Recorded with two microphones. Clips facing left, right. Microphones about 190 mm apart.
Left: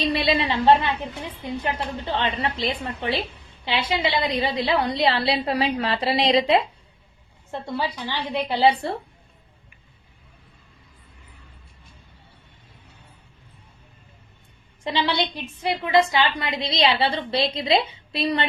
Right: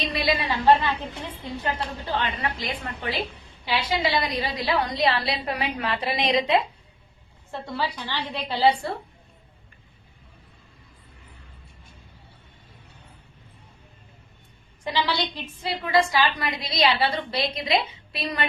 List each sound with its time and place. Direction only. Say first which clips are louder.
0.0 s a woman's voice: left 4 dB; 30° left (ahead or behind)
7.5 s a woman's voice: left 2 dB; 20° left (ahead or behind)
14.8 s a woman's voice: left 2 dB; 20° left (ahead or behind)